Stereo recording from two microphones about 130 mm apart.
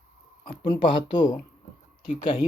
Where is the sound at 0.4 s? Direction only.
40° left (ahead or behind).